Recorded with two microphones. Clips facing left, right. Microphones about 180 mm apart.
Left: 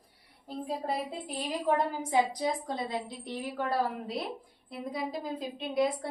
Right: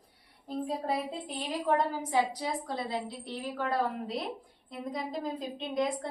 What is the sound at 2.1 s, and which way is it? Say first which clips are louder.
A woman's voice: left 5 dB; 15° left (ahead or behind).